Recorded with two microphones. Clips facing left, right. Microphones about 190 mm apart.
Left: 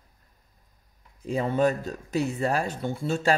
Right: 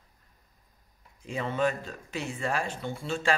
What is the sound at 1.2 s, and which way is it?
Speech, 40° left (ahead or behind).